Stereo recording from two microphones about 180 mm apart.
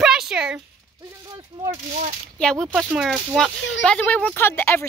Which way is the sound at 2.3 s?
5° left (ahead or behind).